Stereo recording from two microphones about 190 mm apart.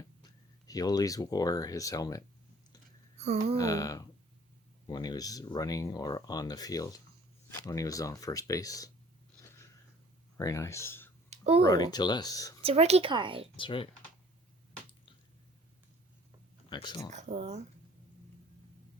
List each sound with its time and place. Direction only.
0.7 s speech: 20° left (ahead or behind)
3.2 s a sound: 35° right (ahead or behind)
3.6 s speech: 20° left (ahead or behind)
10.3 s speech: 15° left (ahead or behind)
11.3 s a sound: 30° right (ahead or behind)
11.6 s speech: 20° left (ahead or behind)
12.6 s speech: 35° right (ahead or behind)
13.6 s speech: 25° left (ahead or behind)
16.6 s speech: 25° left (ahead or behind)
17.1 s speech: 40° right (ahead or behind)